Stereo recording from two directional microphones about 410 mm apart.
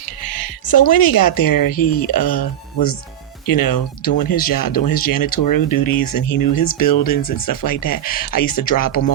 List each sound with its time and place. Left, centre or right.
0.2 s speech: left